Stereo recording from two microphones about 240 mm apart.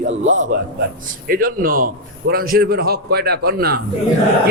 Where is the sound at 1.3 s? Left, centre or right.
Right.